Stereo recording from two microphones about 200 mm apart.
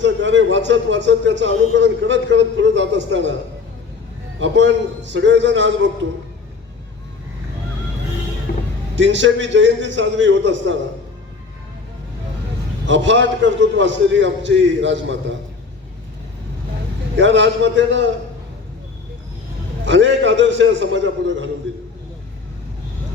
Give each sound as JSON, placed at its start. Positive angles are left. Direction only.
{"t": 0.0, "sound": "a man's voice", "side_deg": -65}
{"t": 4.4, "sound": "a man's voice", "side_deg": -65}
{"t": 8.5, "sound": "music", "side_deg": 50}
{"t": 9.0, "sound": "a man's voice", "side_deg": -65}
{"t": 12.8, "sound": "a man's voice", "side_deg": -65}
{"t": 17.2, "sound": "a man's voice", "side_deg": -65}
{"t": 19.8, "sound": "a man's voice", "side_deg": -65}